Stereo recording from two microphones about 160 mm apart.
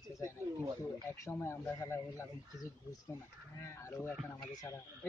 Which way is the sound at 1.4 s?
15° left (ahead or behind).